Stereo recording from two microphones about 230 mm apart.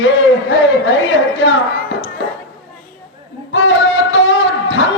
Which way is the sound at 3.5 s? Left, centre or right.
Left.